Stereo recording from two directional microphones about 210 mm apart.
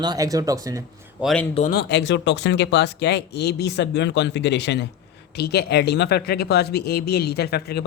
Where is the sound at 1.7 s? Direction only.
50° left (ahead or behind).